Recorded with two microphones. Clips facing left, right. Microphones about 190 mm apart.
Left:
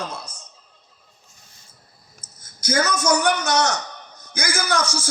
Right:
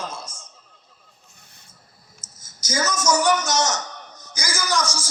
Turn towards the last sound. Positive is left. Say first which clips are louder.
# left 1 dB
turn(degrees=60)  # may be behind; listen again after turning